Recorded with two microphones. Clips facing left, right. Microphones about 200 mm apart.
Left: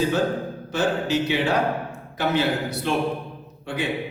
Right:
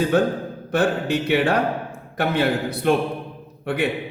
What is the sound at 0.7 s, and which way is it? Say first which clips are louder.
Speech: right 2 dB; 55° right (ahead or behind).